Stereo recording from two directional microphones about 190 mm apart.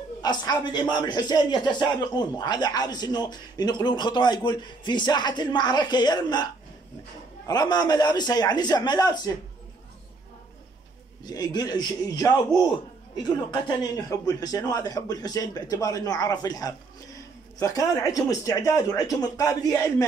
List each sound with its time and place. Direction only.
0.2 s speech: 20° left (ahead or behind)
11.2 s speech: 20° left (ahead or behind)